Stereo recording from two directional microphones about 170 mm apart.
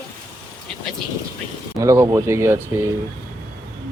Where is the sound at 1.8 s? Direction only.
20° right (ahead or behind).